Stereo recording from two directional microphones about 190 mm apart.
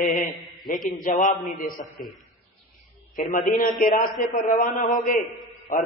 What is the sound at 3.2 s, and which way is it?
A man's voice, 45° left (ahead or behind).